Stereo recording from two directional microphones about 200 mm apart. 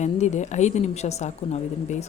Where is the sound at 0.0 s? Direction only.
35° left (ahead or behind).